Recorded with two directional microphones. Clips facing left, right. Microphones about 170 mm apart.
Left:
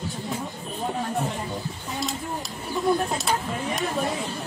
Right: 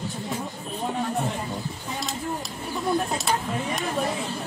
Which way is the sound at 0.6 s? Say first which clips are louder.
Right 1 dB; centre (ahead or behind).